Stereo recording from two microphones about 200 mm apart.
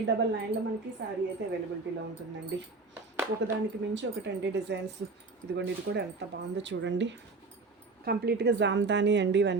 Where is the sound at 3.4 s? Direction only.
60° right (ahead or behind).